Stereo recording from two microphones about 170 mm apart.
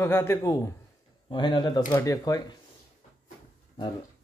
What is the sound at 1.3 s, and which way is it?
Speech, 25° left (ahead or behind).